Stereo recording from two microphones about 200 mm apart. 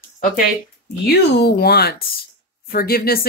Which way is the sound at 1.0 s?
55° left (ahead or behind).